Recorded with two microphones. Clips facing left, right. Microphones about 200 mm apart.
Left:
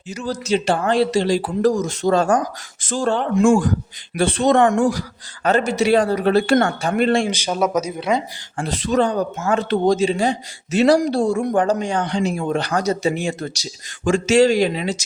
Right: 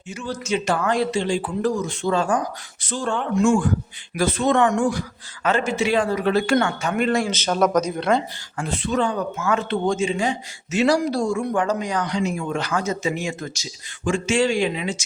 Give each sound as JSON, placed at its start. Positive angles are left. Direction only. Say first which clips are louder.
{"t": 0.1, "sound": "speech", "louder": "left 4 dB", "side_deg": 40}
{"t": 4.6, "sound": "speech", "louder": "left 3 dB", "side_deg": 45}
{"t": 7.3, "sound": "speech", "louder": "even", "side_deg": 10}
{"t": 8.5, "sound": "speech", "louder": "left 4 dB", "side_deg": 35}